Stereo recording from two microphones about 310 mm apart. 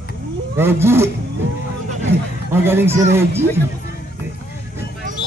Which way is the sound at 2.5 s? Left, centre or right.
Centre.